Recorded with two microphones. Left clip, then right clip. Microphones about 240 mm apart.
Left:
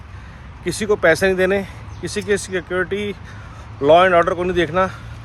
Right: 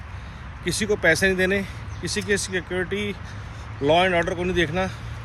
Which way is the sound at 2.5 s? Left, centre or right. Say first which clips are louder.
Left 5 dB; left.